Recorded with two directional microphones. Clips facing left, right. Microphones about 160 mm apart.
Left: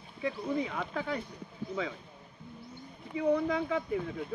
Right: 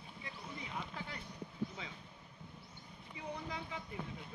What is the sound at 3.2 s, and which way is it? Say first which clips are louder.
Speech: left 16 dB; 90° left.